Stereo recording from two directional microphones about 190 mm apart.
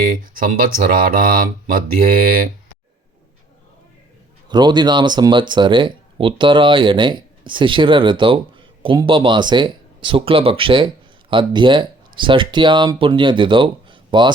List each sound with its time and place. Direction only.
0.3 s speech: 45° right (ahead or behind)
4.4 s speech: 25° right (ahead or behind)